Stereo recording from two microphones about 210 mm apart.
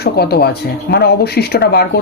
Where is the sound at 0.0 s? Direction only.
50° left (ahead or behind).